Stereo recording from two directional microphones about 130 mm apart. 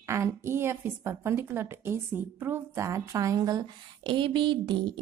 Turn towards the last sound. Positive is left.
turn(degrees=-35)  # may be behind; listen again after turning